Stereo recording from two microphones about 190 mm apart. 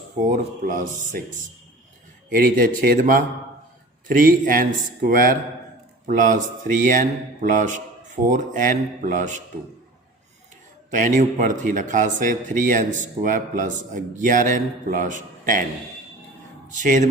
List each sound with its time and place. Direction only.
0.3 s a man's voice: 45° right (ahead or behind)
4.3 s a man's voice: 45° right (ahead or behind)
10.9 s a man's voice: 40° right (ahead or behind)
16.7 s a man's voice: 40° right (ahead or behind)